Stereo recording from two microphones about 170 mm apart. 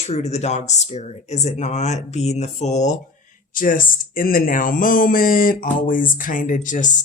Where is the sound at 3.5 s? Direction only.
55° left (ahead or behind).